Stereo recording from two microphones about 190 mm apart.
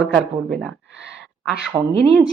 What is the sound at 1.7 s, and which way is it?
Speech, 15° right (ahead or behind).